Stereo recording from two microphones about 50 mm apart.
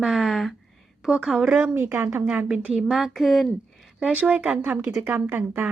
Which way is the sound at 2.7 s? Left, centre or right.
Centre.